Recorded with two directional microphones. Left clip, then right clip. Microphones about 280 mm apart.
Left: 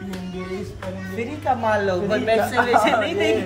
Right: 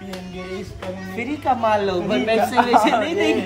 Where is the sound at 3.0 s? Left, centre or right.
Right.